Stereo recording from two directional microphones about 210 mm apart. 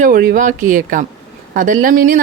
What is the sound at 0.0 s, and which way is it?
Speech, 45° right (ahead or behind).